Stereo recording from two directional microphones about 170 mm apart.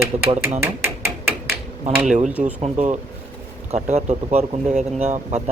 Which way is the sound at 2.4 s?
40° right (ahead or behind).